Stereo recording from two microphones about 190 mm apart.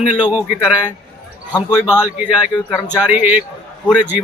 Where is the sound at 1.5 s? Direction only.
20° left (ahead or behind).